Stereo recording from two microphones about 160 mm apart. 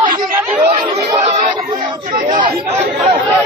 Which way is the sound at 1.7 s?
60° right (ahead or behind).